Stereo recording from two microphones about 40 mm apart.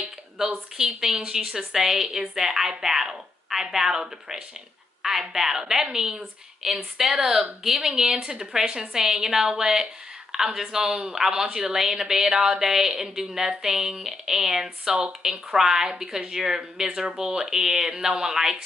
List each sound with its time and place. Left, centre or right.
1.0 s a woman's voice: centre